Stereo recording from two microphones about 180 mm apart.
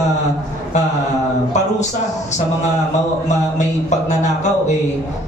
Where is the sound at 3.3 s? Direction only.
40° left (ahead or behind).